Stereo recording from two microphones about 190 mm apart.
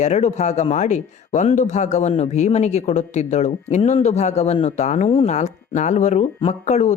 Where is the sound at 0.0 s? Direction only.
35° left (ahead or behind).